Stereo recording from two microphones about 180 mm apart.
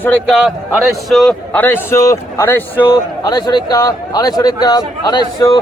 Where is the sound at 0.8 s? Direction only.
Centre (ahead or behind); by 5.5 s 20° left (ahead or behind).